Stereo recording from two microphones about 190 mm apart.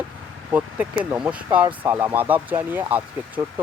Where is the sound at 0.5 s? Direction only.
5° right (ahead or behind).